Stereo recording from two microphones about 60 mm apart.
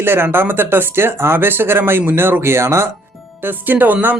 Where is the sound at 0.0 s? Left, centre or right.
Right.